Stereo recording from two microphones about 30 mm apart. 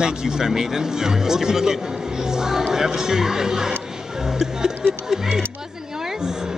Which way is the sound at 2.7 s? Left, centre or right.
Centre.